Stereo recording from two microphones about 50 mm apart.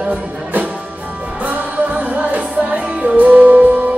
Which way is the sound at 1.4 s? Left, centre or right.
Right.